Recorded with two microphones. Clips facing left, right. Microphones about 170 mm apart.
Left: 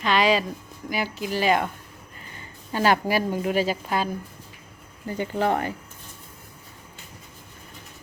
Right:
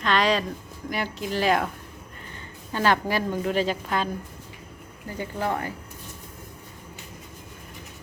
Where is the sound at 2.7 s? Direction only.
10° left (ahead or behind).